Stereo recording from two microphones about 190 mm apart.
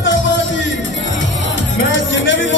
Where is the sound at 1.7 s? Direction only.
85° left.